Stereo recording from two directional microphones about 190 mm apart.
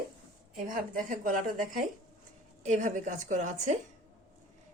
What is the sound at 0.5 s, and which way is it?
A woman's voice, 45° right (ahead or behind).